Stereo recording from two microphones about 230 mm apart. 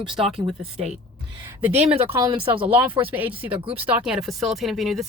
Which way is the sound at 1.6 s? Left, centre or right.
Centre.